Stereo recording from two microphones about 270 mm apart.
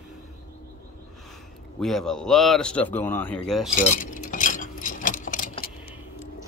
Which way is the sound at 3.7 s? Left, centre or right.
Left.